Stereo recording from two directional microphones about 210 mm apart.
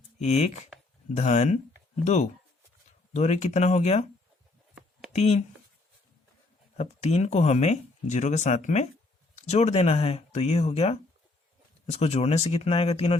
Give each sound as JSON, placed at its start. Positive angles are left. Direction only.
{"t": 0.2, "sound": "speech", "side_deg": 30}
{"t": 4.7, "sound": "a sound", "side_deg": 0}
{"t": 5.1, "sound": "speech", "side_deg": 30}
{"t": 6.7, "sound": "speech", "side_deg": 30}